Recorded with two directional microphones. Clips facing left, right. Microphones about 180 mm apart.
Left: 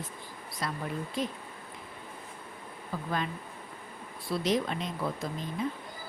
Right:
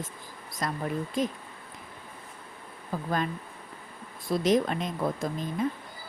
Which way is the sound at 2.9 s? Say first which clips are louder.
Right 4 dB; 45° right (ahead or behind).